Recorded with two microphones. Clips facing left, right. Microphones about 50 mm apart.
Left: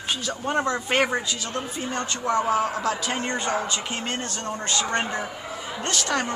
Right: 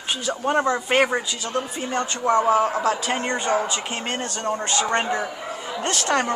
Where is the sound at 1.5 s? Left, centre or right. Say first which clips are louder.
Right 6 dB; right.